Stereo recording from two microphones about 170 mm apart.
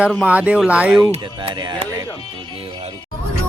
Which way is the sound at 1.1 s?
30° right (ahead or behind).